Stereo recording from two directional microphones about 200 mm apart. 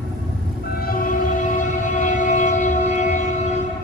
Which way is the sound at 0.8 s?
45° left (ahead or behind).